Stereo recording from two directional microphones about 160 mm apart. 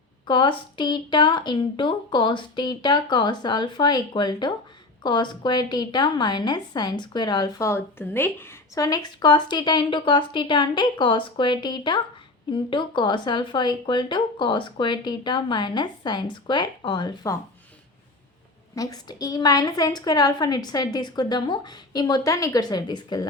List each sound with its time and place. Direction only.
0.3 s a woman's voice: 30° left (ahead or behind)
18.7 s a woman's voice: 20° left (ahead or behind)